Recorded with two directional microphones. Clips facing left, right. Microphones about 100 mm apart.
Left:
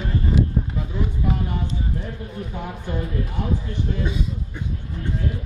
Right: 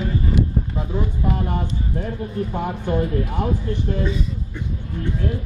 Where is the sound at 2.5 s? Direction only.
50° right (ahead or behind).